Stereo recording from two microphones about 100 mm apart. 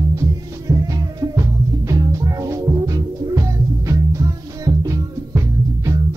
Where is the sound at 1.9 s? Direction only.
35° right (ahead or behind).